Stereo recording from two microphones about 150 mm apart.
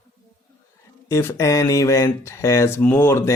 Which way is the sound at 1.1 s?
20° left (ahead or behind).